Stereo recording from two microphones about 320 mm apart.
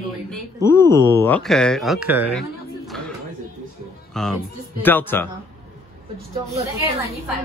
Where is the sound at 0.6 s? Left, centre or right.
Centre.